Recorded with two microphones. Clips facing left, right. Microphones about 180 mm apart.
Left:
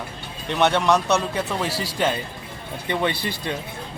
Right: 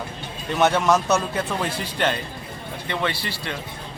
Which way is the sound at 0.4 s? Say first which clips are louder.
Even; 5° right (ahead or behind).